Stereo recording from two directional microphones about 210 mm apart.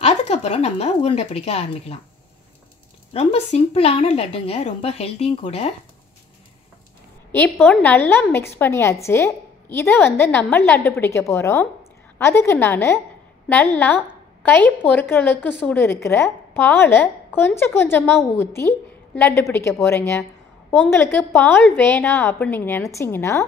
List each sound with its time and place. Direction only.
0.0 s speech: 30° left (ahead or behind)
3.1 s a woman's voice: 30° left (ahead or behind)
7.3 s a woman's voice: 10° left (ahead or behind)
14.4 s a woman's voice: 10° left (ahead or behind)